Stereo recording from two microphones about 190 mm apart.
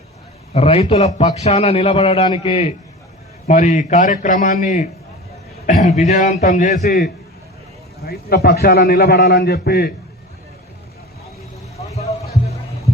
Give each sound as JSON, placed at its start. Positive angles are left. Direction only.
{"t": 0.5, "sound": "a man's voice", "side_deg": 30}
{"t": 12.3, "sound": "music", "side_deg": 35}